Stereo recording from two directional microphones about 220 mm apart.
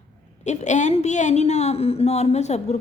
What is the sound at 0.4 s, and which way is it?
A woman's voice, 30° left (ahead or behind).